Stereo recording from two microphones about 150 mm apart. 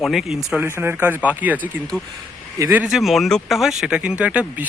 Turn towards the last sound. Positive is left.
turn(degrees=-10)  # may be behind; listen again after turning